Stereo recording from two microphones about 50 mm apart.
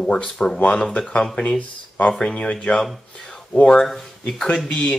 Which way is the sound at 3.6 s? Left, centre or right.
Centre.